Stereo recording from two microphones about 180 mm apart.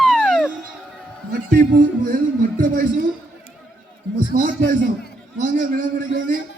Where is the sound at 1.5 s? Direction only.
50° right (ahead or behind).